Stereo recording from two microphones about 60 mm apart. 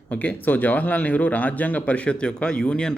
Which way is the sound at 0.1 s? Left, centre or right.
Left.